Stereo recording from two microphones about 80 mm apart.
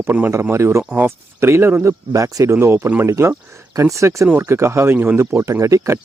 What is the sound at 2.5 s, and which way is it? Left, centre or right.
Speech, right.